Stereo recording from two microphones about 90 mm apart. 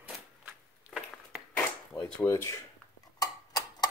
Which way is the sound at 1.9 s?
30° left (ahead or behind).